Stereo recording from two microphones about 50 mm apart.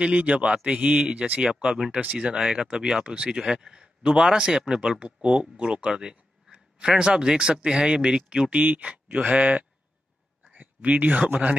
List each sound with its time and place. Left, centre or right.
0.0 s a man's voice: right
1.9 s speech: right
2.1 s a man's voice: centre
8.5 s a man's voice: right
10.5 s a sound: right
10.9 s speech: right